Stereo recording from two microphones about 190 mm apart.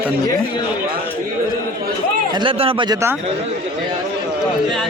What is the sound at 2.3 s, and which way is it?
Speech, 25° right (ahead or behind).